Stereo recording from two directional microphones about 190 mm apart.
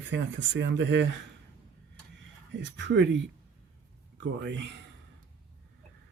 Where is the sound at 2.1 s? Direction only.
70° right (ahead or behind).